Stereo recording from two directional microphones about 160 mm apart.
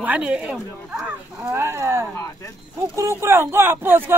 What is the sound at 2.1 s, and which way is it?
Speech, 20° left (ahead or behind).